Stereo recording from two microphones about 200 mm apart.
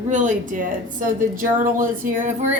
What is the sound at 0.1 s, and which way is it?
A woman's voice, 40° right (ahead or behind).